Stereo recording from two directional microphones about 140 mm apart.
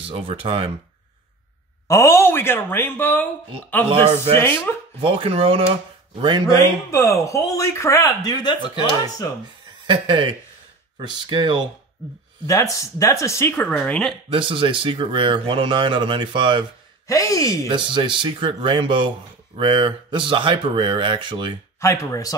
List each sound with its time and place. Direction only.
0.1 s speech: 40° right (ahead or behind)
1.9 s speech: 20° left (ahead or behind)
3.9 s speech: 45° right (ahead or behind)
4.4 s speech: 15° left (ahead or behind)
5.0 s speech: 40° right (ahead or behind)
6.4 s speech: 25° left (ahead or behind)
9.8 s speech: 35° right (ahead or behind)
12.4 s speech: 25° left (ahead or behind)
13.7 s speech: 5° left (ahead or behind)
14.3 s speech: 40° right (ahead or behind)
17.1 s speech: 25° left (ahead or behind)
17.6 s speech: 35° right (ahead or behind)
21.7 s speech: 20° left (ahead or behind)